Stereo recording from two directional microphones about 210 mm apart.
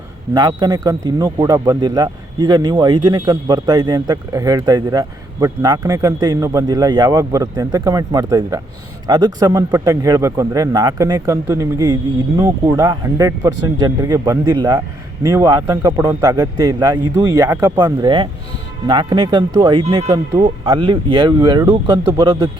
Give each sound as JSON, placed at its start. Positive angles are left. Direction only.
{"t": 0.3, "sound": "speech", "side_deg": -20}